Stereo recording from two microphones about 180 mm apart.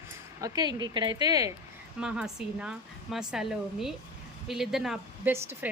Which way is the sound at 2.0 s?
5° right (ahead or behind).